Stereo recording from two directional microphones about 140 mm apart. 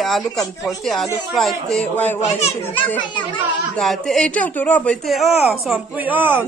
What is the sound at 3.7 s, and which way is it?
Speech, centre (ahead or behind).